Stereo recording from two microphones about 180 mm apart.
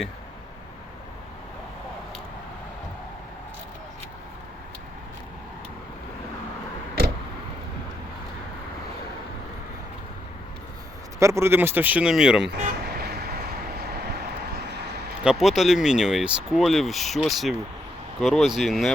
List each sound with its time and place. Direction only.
11.2 s speech: 15° right (ahead or behind)
12.6 s vehicle: 60° right (ahead or behind)
15.2 s speech: 5° right (ahead or behind)